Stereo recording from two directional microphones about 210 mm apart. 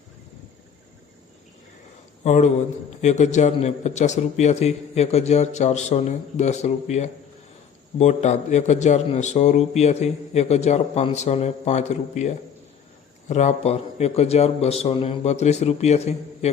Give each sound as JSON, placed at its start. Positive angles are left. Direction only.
{"t": 2.2, "sound": "speech", "side_deg": 35}